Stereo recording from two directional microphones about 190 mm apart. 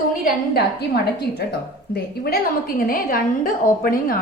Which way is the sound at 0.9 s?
55° left (ahead or behind).